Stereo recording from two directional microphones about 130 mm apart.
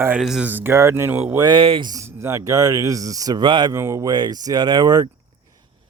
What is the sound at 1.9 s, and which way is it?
Speech, 20° right (ahead or behind).